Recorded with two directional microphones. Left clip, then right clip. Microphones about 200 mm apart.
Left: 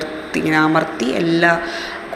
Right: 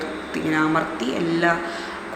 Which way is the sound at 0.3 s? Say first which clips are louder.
Left 6 dB; 20° left (ahead or behind).